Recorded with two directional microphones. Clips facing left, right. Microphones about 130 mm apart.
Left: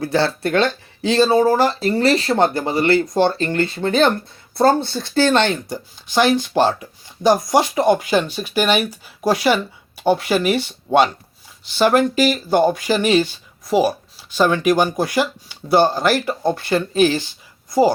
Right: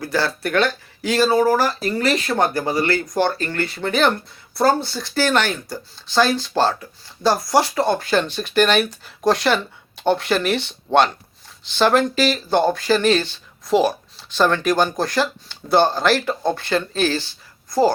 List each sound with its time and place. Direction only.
0.0 s speech: 25° left (ahead or behind)
4.8 s speech: 55° left (ahead or behind)
5.1 s speech: 25° left (ahead or behind)